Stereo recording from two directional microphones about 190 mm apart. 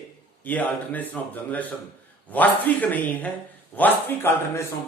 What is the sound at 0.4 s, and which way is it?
A man's voice, 10° left (ahead or behind).